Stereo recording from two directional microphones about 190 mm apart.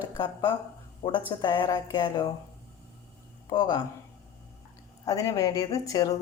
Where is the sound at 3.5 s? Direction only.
20° left (ahead or behind).